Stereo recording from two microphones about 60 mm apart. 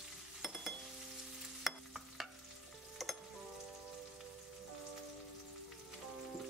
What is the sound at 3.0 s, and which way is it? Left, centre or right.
Frying, centre.